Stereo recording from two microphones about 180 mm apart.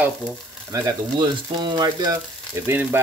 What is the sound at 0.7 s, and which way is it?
Speech, 25° right (ahead or behind).